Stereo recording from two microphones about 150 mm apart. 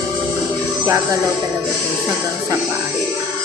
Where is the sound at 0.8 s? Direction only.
20° right (ahead or behind).